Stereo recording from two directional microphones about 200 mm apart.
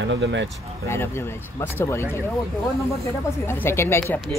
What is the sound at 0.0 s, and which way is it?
Speech, 65° right (ahead or behind).